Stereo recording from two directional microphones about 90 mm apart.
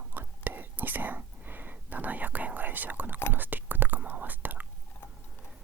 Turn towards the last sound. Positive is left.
turn(degrees=-20)  # may be behind; listen again after turning